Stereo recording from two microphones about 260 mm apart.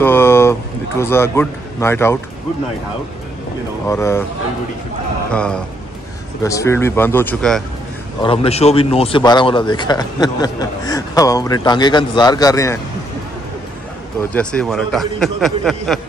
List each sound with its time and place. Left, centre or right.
0.0 s a sound: centre
3.8 s a man's voice: centre
5.3 s a man's voice: centre
8.2 s a man's voice: centre
14.3 s a man's voice: centre